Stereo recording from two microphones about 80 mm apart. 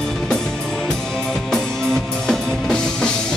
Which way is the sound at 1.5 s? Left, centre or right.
Centre.